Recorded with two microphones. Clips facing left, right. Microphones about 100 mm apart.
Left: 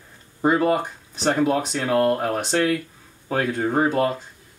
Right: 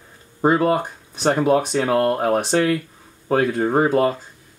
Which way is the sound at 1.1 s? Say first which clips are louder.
Right 3 dB; 5° right (ahead or behind).